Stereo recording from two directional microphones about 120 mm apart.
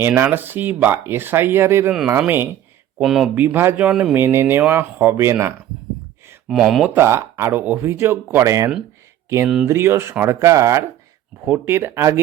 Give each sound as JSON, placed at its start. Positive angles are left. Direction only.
{"t": 0.0, "sound": "speech", "side_deg": -20}
{"t": 1.9, "sound": "speech", "side_deg": -5}
{"t": 2.1, "sound": "speech", "side_deg": -20}
{"t": 3.0, "sound": "speech", "side_deg": 0}
{"t": 3.3, "sound": "speech", "side_deg": -15}
{"t": 4.2, "sound": "speech", "side_deg": -20}
{"t": 6.5, "sound": "speech", "side_deg": 0}
{"t": 6.8, "sound": "speech", "side_deg": -20}